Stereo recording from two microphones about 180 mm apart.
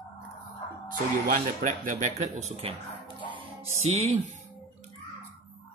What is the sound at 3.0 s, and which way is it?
Music, 35° right (ahead or behind).